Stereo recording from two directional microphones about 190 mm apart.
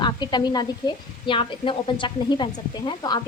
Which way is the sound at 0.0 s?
20° left (ahead or behind).